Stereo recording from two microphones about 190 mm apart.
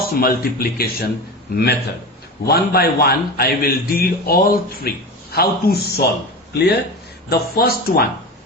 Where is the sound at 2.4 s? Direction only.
55° left (ahead or behind).